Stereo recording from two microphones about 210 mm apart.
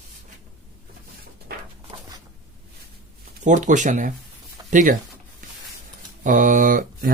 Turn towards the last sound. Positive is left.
turn(degrees=-40)  # may be behind; listen again after turning